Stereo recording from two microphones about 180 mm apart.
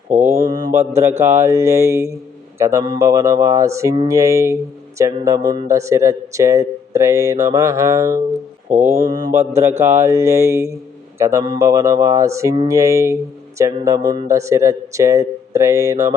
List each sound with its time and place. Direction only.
0.1 s mantra: 40° right (ahead or behind)
0.4 s mantra: 20° right (ahead or behind)
0.7 s speech: 15° right (ahead or behind)
8.7 s mantra: 40° right (ahead or behind)
9.0 s speech: 20° right (ahead or behind)